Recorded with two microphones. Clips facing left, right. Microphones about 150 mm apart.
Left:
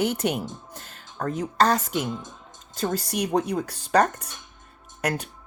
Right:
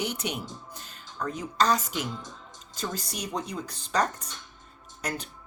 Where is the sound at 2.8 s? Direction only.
55° left (ahead or behind).